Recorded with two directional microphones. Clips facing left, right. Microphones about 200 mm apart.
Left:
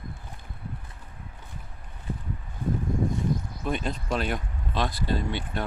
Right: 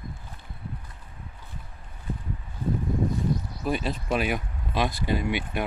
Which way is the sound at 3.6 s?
5° right (ahead or behind).